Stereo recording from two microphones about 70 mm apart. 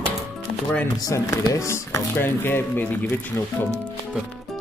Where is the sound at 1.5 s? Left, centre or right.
Left.